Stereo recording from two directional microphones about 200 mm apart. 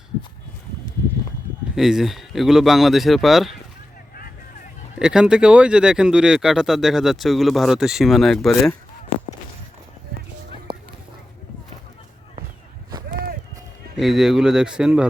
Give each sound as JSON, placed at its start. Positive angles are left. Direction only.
{"t": 1.7, "sound": "speech", "side_deg": 0}
{"t": 4.9, "sound": "speech", "side_deg": -5}
{"t": 10.7, "sound": "a sound", "side_deg": -25}
{"t": 13.9, "sound": "speech", "side_deg": 0}